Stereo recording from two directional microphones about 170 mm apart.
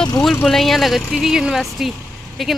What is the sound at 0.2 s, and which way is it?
Speech, centre (ahead or behind).